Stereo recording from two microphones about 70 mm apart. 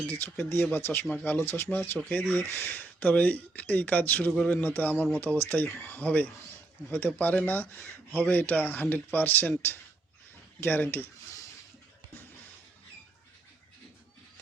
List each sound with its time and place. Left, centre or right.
0.1 s speech: left
2.0 s speech: centre